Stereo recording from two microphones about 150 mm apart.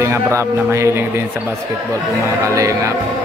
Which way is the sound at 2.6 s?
20° right (ahead or behind).